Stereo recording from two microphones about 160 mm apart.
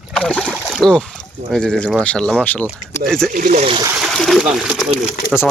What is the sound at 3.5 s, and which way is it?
Speech, 45° right (ahead or behind).